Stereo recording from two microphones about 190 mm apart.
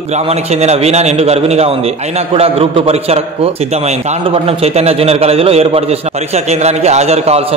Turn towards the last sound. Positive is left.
turn(degrees=-35)  # may be behind; listen again after turning